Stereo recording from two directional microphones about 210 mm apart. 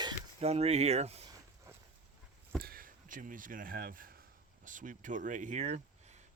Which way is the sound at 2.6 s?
45° right (ahead or behind).